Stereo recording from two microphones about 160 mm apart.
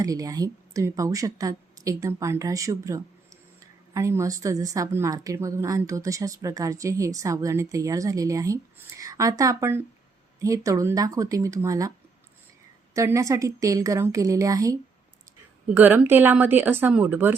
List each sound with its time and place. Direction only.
0.0 s speech: 20° right (ahead or behind)